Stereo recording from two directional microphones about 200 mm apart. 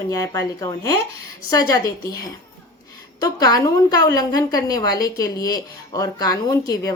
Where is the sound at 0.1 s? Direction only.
15° left (ahead or behind).